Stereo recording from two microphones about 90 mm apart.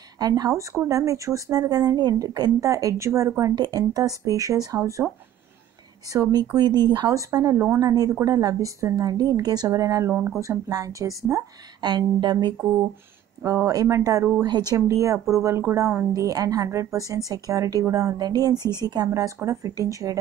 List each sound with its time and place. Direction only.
0.2 s speech: 45° right (ahead or behind)
6.5 s a woman's voice: 50° right (ahead or behind)
7.1 s a woman's voice: 40° right (ahead or behind)
11.8 s a woman's voice: 55° right (ahead or behind)
13.4 s a woman's voice: 35° right (ahead or behind)
19.0 s speech: 30° right (ahead or behind)